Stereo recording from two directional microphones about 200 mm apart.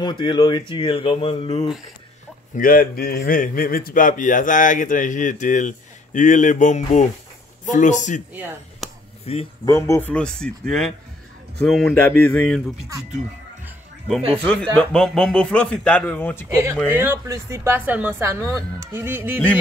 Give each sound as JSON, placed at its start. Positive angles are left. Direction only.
{"t": 0.0, "sound": "speech", "side_deg": 25}
{"t": 2.5, "sound": "a man's voice", "side_deg": 45}
{"t": 8.8, "sound": "a sound", "side_deg": 0}
{"t": 9.2, "sound": "speech", "side_deg": 30}
{"t": 9.7, "sound": "speech", "side_deg": 15}
{"t": 14.4, "sound": "speech", "side_deg": 5}
{"t": 16.4, "sound": "speech", "side_deg": -15}